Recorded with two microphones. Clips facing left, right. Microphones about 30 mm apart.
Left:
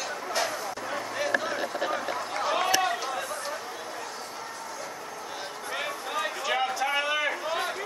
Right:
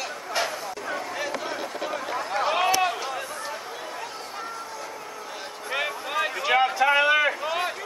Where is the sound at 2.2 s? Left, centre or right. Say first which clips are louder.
Right 7 dB; centre.